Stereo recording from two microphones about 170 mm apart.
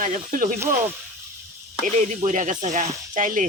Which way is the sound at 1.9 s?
45° right (ahead or behind).